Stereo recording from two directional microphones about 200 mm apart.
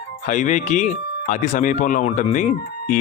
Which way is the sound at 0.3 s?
40° left (ahead or behind).